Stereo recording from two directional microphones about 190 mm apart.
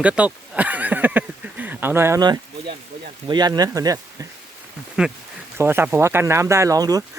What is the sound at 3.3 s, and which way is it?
Speech, 20° right (ahead or behind).